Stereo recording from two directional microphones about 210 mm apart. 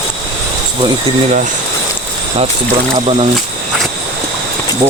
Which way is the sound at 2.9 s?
25° right (ahead or behind).